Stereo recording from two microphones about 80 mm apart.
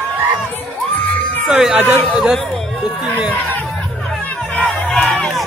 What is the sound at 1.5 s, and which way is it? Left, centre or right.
Speech, centre.